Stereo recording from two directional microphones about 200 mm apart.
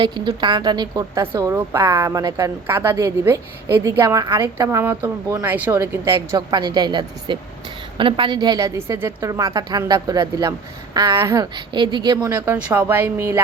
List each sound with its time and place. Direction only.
0.0 s a woman's voice: 25° right (ahead or behind)
12.5 s a woman's voice: 10° right (ahead or behind)